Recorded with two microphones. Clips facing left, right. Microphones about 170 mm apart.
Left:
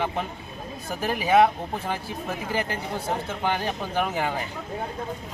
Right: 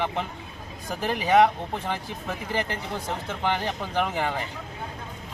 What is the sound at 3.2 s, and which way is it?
Speech, 10° left (ahead or behind).